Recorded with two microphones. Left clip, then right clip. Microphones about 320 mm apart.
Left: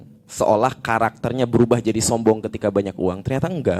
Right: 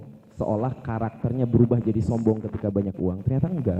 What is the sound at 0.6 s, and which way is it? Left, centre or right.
Speech, centre.